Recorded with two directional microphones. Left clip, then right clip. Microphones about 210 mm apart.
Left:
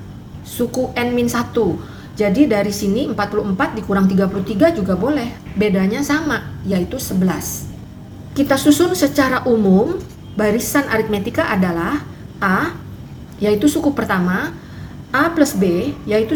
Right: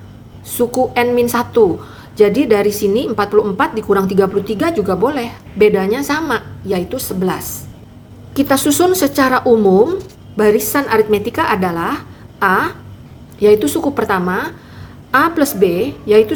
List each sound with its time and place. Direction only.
0.5 s a woman's voice: 40° right (ahead or behind)